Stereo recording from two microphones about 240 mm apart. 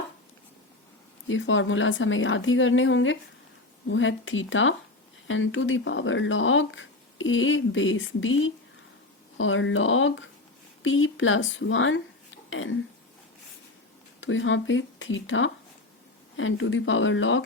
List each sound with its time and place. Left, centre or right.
1.3 s speech: left
14.2 s speech: left